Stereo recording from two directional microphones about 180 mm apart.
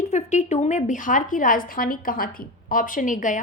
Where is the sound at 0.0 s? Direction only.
40° left (ahead or behind).